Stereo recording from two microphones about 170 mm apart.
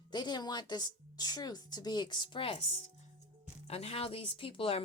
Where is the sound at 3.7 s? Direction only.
35° left (ahead or behind).